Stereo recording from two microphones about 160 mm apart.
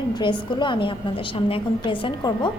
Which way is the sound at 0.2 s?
30° left (ahead or behind).